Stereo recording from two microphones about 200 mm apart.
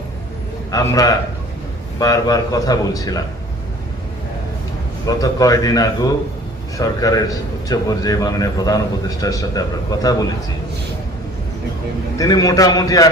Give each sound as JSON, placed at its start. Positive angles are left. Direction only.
{"t": 0.7, "sound": "a man's voice", "side_deg": 15}
{"t": 5.0, "sound": "a man's voice", "side_deg": 15}
{"t": 12.1, "sound": "a man's voice", "side_deg": 15}